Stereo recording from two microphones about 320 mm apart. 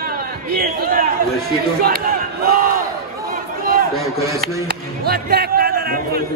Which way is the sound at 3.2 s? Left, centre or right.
Right.